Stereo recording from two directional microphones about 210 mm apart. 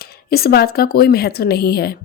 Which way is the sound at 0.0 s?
45° left (ahead or behind).